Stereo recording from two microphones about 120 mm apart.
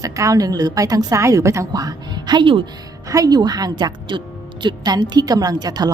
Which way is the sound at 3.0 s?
30° right (ahead or behind).